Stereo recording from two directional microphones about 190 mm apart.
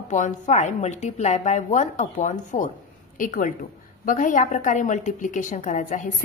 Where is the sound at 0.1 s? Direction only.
40° left (ahead or behind).